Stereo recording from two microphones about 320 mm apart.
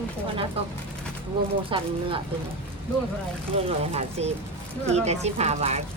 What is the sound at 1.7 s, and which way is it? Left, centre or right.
Speech, centre.